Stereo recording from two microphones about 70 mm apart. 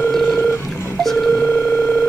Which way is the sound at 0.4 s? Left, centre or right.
Left.